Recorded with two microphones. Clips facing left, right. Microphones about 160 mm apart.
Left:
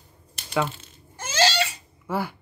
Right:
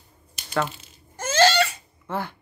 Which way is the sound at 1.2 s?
50° right (ahead or behind).